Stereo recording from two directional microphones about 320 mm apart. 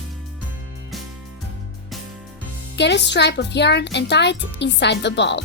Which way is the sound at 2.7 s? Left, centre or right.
Left.